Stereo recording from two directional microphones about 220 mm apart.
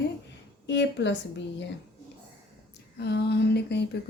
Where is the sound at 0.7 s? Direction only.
55° left (ahead or behind).